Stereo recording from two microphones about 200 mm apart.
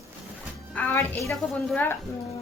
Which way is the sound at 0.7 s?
10° left (ahead or behind).